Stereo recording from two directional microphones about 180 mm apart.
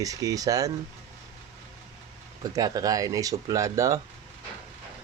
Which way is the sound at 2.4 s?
20° right (ahead or behind).